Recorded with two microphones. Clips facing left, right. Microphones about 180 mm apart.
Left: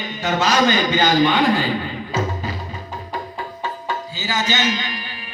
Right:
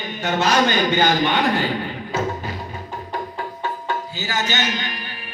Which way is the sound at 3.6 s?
60° right (ahead or behind).